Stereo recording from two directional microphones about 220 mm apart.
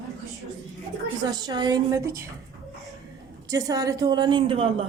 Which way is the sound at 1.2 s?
20° right (ahead or behind).